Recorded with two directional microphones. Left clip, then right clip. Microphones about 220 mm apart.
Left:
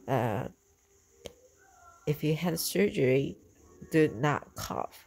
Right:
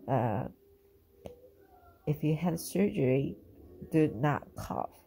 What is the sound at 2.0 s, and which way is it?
Speech, 25° left (ahead or behind).